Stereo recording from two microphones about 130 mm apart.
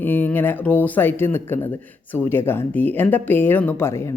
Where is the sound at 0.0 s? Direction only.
15° left (ahead or behind).